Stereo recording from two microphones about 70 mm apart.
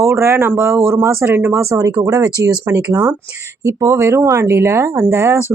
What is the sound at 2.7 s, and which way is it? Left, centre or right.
Speech, right.